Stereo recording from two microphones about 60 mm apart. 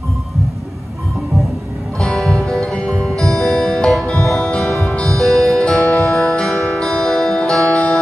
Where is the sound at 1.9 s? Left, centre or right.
Centre.